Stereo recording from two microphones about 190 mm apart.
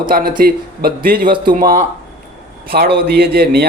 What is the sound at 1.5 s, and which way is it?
Speech, 45° right (ahead or behind).